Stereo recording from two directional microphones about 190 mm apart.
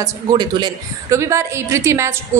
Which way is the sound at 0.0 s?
20° right (ahead or behind).